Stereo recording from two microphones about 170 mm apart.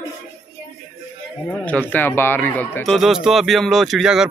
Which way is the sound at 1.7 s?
10° left (ahead or behind).